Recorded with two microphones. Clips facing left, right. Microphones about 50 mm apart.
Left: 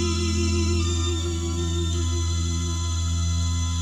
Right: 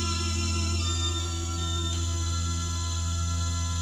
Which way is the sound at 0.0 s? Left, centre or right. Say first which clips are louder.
Left 7 dB; left.